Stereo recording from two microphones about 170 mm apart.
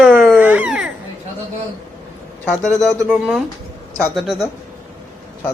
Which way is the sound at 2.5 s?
5° left (ahead or behind).